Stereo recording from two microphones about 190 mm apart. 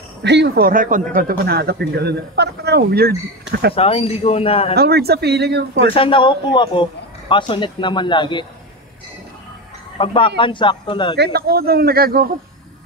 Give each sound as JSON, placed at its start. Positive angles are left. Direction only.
{"t": 0.2, "sound": "a man's voice", "side_deg": -65}
{"t": 3.7, "sound": "a man's voice", "side_deg": 30}
{"t": 4.7, "sound": "speech", "side_deg": -55}
{"t": 5.9, "sound": "speech", "side_deg": 25}
{"t": 9.9, "sound": "speech", "side_deg": 30}
{"t": 11.1, "sound": "a man's voice", "side_deg": -55}